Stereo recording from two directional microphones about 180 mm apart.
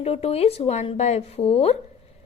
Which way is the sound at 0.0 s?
35° left (ahead or behind).